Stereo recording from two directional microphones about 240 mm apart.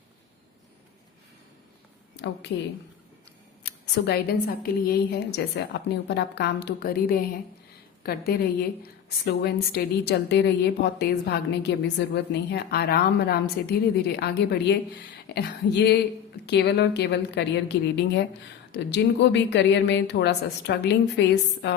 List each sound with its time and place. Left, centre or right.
2.1 s a woman's voice: left
3.6 s a woman's voice: left